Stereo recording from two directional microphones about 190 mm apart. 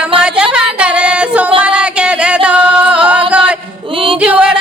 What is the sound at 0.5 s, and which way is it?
Singing, 5° right (ahead or behind).